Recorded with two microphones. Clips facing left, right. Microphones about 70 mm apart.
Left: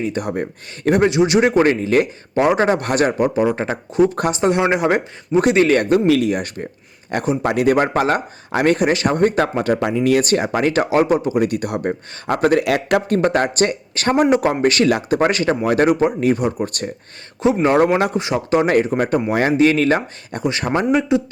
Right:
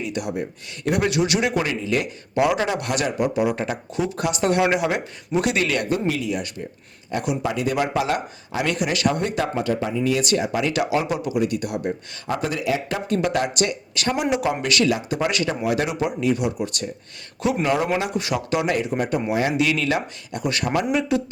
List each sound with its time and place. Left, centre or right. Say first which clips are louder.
0.0 s a man's voice: left 5 dB; left
4.4 s a man's voice: left 2 dB; left
9.8 s speech: left 6 dB; left
10.2 s speech: left 4 dB; left
13.1 s a man's voice: left 5 dB; left
14.8 s speech: left 6 dB; left
17.4 s a man's voice: left 6 dB; left
17.7 s speech: left 8 dB; left
18.1 s a man's voice: left 5 dB; left
19.5 s a man's voice: left 7 dB; left
20.4 s speech: left 4 dB; left